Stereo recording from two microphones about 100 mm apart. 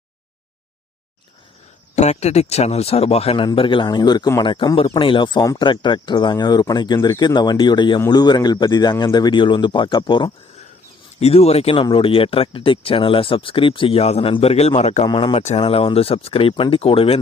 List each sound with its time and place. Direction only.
2.0 s speech: 90° left
3.3 s speech: 55° left (ahead or behind)
11.2 s speech: 90° left; by 11.9 s 75° left (ahead or behind)
11.9 s speech: 60° left (ahead or behind)